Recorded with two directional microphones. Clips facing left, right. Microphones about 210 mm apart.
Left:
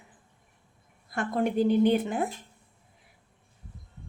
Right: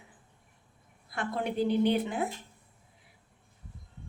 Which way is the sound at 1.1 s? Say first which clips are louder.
Left 5 dB; 45° left (ahead or behind).